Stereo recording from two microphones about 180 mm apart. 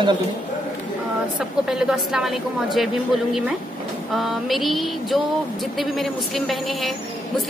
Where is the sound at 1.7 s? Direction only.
5° right (ahead or behind).